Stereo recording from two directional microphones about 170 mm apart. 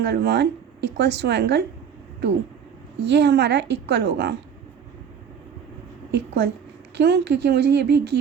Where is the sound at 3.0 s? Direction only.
90° right.